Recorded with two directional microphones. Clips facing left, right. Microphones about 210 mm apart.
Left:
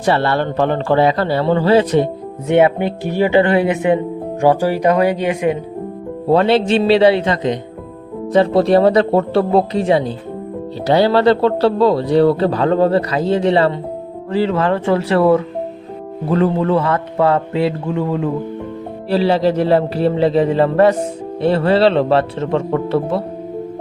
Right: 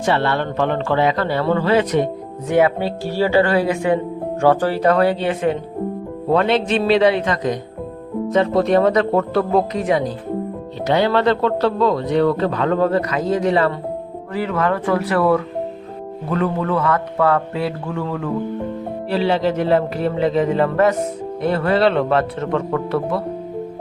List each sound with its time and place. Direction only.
0.0 s speech: 35° left (ahead or behind); by 5.5 s 15° left (ahead or behind)
6.3 s speech: 30° left (ahead or behind)
19.1 s speech: 35° left (ahead or behind)